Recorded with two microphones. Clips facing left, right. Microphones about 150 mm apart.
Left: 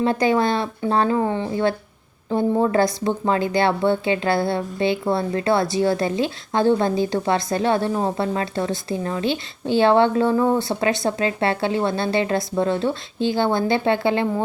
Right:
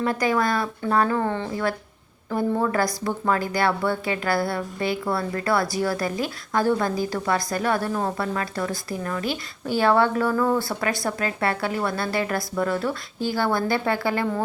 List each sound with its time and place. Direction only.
0.0 s speech: 25° left (ahead or behind)